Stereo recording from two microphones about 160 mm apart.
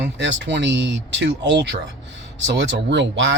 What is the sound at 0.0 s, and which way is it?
A man's voice, 90° right.